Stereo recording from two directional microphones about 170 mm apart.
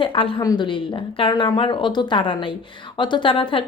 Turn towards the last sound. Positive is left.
turn(degrees=30)  # may be behind; listen again after turning